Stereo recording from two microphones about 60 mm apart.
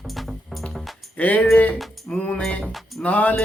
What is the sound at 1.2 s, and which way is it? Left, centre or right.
Speech, left.